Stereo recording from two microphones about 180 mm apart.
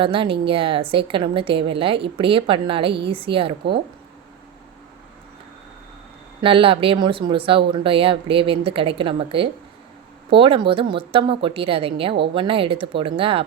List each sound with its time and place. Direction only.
0.0 s speech: 30° right (ahead or behind)
6.4 s speech: 30° right (ahead or behind)